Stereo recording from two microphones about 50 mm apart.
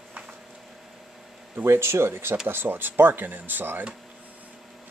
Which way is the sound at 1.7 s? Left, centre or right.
Right.